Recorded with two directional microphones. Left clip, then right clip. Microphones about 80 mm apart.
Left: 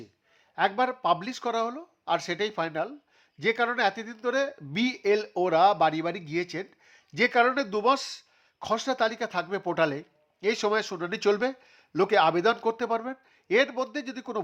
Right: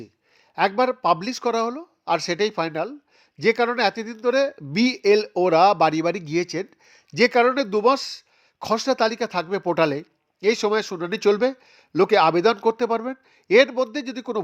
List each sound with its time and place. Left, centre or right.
0.5 s speech: right
6.5 s speech: right
8.5 s speech: right
10.6 s speech: right